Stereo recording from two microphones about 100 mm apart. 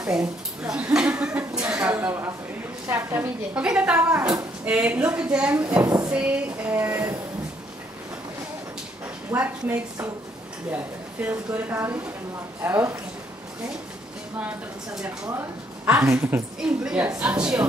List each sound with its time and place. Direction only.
0.1 s speech: 10° right (ahead or behind)
9.3 s speech: 20° right (ahead or behind)
15.3 s speech: 20° right (ahead or behind)
16.5 s speech: 10° right (ahead or behind)